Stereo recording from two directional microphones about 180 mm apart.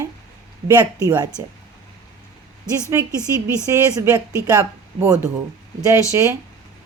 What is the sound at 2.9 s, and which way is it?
Speech, 10° right (ahead or behind).